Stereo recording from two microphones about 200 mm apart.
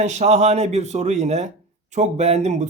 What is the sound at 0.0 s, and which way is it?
Speech, 35° right (ahead or behind).